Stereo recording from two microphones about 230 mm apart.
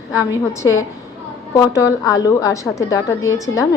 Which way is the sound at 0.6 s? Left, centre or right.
Centre.